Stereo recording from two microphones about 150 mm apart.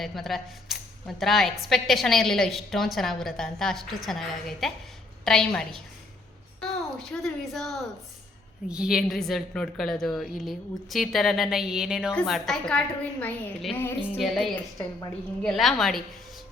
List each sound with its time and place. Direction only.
0.0 s speech: centre (ahead or behind)
14.5 s a woman's voice: 20° left (ahead or behind)
15.4 s speech: centre (ahead or behind)